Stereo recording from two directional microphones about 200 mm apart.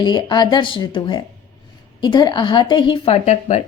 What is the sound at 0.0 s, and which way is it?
A woman's voice, 20° left (ahead or behind).